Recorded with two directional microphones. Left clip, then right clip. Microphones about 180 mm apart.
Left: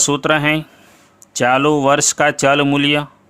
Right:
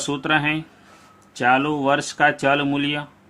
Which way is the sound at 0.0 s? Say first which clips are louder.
Left 6 dB; 50° left (ahead or behind).